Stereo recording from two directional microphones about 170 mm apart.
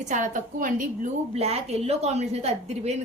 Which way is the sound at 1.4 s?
35° right (ahead or behind).